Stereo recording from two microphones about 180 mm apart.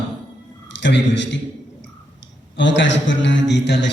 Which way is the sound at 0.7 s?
80° left.